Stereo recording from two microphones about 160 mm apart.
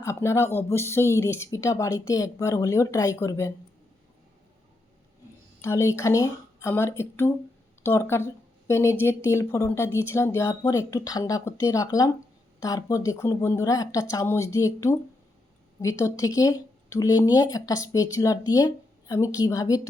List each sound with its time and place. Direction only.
0.0 s speech: 15° left (ahead or behind)
5.6 s speech: 15° left (ahead or behind)